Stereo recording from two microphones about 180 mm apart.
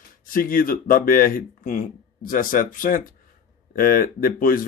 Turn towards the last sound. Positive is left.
turn(degrees=50)  # may be behind; listen again after turning